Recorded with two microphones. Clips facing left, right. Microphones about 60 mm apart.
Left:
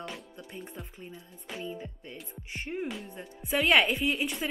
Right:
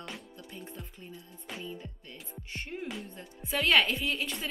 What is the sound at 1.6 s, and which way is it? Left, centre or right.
A woman's voice, centre.